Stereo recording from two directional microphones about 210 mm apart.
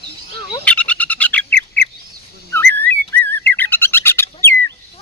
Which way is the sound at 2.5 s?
10° left (ahead or behind).